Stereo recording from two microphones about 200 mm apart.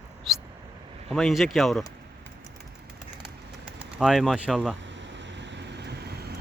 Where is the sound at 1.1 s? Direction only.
Centre (ahead or behind).